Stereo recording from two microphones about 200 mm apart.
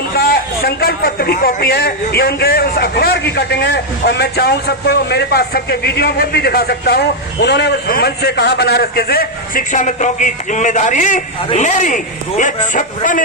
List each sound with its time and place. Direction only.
0.2 s a man's voice: 50° left (ahead or behind)